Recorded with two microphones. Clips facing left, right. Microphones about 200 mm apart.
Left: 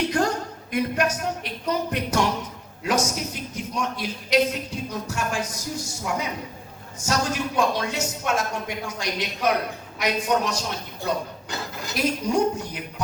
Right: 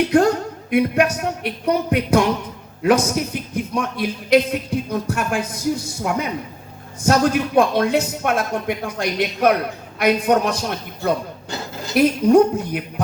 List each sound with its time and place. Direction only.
0.1 s a man's voice: 60° right (ahead or behind)